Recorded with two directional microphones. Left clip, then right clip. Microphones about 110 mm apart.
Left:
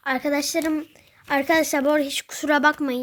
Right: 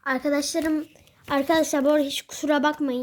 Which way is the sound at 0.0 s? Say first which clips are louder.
Left 1 dB; 20° left (ahead or behind).